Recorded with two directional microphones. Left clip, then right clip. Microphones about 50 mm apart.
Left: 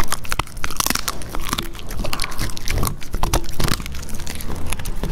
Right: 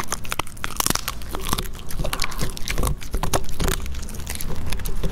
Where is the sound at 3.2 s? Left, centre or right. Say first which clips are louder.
Left 2 dB; left.